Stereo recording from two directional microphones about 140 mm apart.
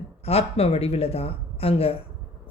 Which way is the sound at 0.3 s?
45° left (ahead or behind).